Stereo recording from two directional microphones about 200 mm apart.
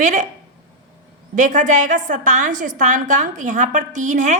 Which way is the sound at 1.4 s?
40° right (ahead or behind).